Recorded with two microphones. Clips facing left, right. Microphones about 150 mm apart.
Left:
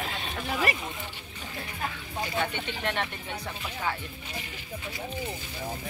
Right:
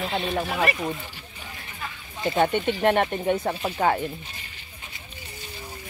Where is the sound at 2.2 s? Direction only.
50° right (ahead or behind).